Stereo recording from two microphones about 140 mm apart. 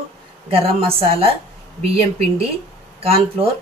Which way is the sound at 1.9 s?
45° right (ahead or behind).